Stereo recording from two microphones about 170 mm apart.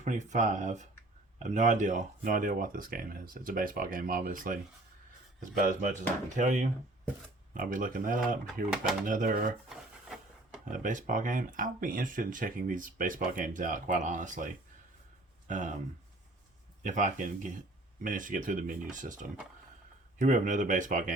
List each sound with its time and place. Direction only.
0.0 s speech: 45° right (ahead or behind)
9.6 s wood: centre (ahead or behind)
10.7 s speech: 50° right (ahead or behind)
16.8 s speech: 45° right (ahead or behind)